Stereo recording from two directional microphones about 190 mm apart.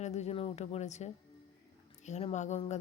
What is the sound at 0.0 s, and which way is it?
A woman's voice, 35° left (ahead or behind).